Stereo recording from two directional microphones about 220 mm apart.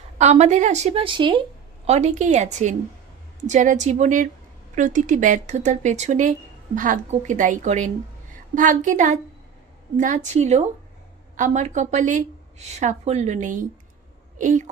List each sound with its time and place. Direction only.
0.2 s a woman's voice: 30° right (ahead or behind)